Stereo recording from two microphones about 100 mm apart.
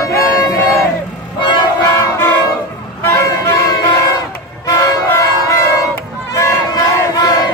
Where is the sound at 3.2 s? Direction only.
35° left (ahead or behind).